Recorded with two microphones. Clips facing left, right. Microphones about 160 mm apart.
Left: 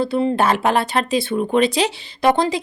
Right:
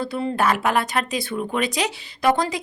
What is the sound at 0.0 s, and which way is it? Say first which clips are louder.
Speech: left 5 dB; 25° left (ahead or behind).